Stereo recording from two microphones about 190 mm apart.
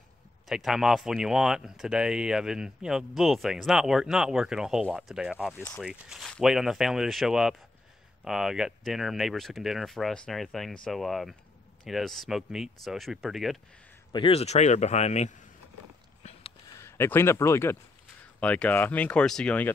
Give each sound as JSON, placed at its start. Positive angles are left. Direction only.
{"t": 0.5, "sound": "speech", "side_deg": 0}
{"t": 5.5, "sound": "speech", "side_deg": 10}
{"t": 5.8, "sound": "speech", "side_deg": -5}
{"t": 14.1, "sound": "speech", "side_deg": 30}
{"t": 16.2, "sound": "a sound", "side_deg": 35}
{"t": 16.7, "sound": "speech", "side_deg": 15}